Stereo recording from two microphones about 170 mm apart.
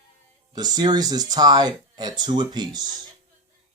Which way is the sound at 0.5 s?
25° right (ahead or behind).